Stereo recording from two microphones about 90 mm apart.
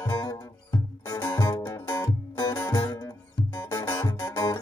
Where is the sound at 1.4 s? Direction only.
50° left (ahead or behind).